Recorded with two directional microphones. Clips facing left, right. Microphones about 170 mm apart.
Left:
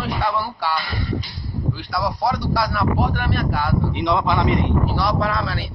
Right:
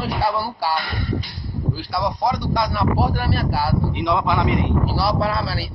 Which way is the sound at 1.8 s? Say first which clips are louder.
Right 1 dB; 25° right (ahead or behind).